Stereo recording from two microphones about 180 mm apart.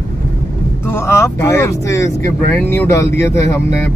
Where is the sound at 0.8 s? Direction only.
15° left (ahead or behind).